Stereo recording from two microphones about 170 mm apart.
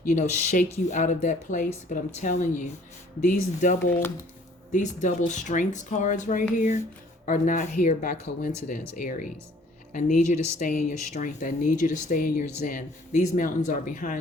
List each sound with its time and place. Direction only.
0.1 s speech: 45° left (ahead or behind)